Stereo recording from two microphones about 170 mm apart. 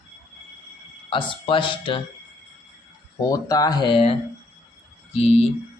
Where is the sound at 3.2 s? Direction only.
20° left (ahead or behind); by 5.3 s 40° left (ahead or behind).